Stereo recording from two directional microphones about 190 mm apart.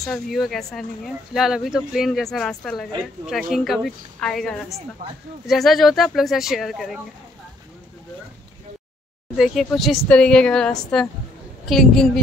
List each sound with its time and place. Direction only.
0.0 s speech: centre (ahead or behind)
5.0 s speech: 50° right (ahead or behind)
5.5 s speech: centre (ahead or behind)
9.4 s speech: centre (ahead or behind)